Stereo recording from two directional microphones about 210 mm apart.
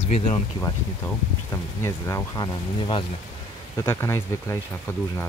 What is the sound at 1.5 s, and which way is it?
Speech, 15° left (ahead or behind).